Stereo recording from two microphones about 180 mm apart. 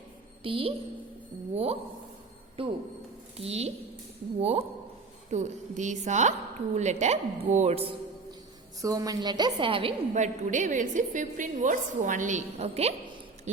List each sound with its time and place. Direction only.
0.4 s a woman's voice: 30° right (ahead or behind)
8.8 s a woman's voice: 20° right (ahead or behind)
10.2 s a woman's voice: 45° right (ahead or behind)